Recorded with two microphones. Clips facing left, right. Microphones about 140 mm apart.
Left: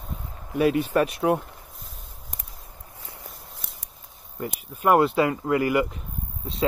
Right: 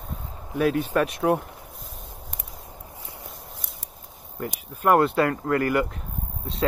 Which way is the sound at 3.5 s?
Centre (ahead or behind).